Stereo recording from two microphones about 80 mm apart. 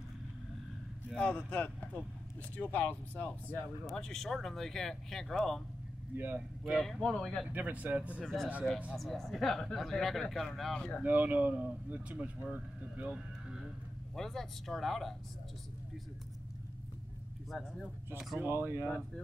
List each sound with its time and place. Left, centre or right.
1.1 s a man's voice: centre
3.9 s speech: centre
6.1 s speech: right
6.6 s speech: centre
7.5 s speech: centre
8.2 s speech: centre
11.0 s speech: right
14.1 s speech: centre
17.5 s speech: centre
18.4 s speech: right